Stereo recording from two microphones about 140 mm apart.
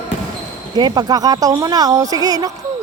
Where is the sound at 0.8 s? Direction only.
30° right (ahead or behind).